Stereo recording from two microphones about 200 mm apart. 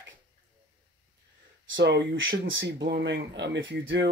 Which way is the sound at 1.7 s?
65° right (ahead or behind).